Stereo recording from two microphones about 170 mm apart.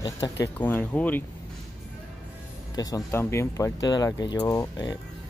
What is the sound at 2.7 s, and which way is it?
Speech, 20° left (ahead or behind).